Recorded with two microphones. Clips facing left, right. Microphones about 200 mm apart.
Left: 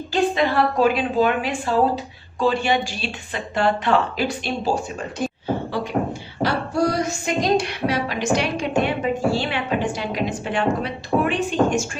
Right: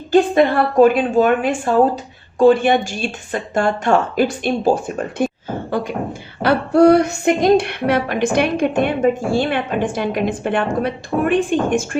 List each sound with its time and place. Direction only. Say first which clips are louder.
0.1 s speech: right 7 dB; 50° right (ahead or behind)
6.4 s speech: right 9 dB; 60° right (ahead or behind)